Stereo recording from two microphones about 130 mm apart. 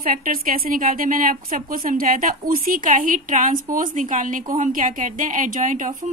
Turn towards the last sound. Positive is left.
turn(degrees=-90)